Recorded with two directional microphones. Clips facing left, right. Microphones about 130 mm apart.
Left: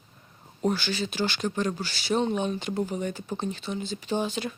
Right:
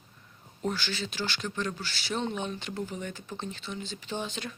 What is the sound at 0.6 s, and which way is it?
Speech, 15° left (ahead or behind).